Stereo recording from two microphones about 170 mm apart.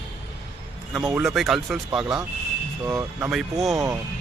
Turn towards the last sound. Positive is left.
turn(degrees=0)  # may be behind; listen again after turning